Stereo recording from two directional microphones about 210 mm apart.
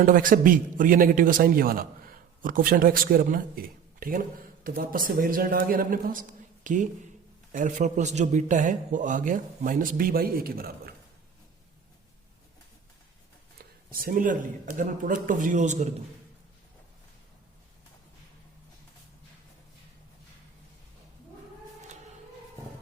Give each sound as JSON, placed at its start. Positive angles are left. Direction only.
{"t": 0.0, "sound": "a man's voice", "side_deg": -40}
{"t": 13.6, "sound": "a man's voice", "side_deg": -45}